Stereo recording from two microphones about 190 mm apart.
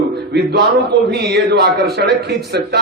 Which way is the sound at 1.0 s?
60° right (ahead or behind).